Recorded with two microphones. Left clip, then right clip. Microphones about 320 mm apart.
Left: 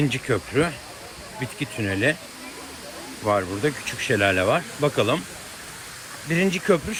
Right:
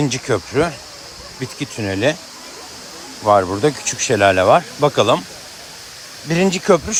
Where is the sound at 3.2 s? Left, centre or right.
Centre.